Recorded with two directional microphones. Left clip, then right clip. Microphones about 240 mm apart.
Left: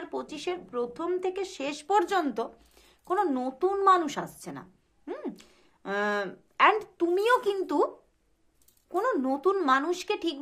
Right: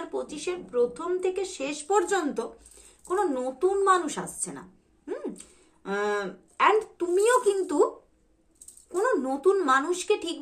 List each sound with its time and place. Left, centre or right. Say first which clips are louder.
0.1 s speech: even; left
8.9 s speech: right 2 dB; left